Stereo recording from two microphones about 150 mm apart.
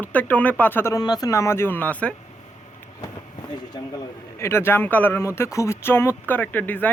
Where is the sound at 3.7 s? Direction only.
25° left (ahead or behind).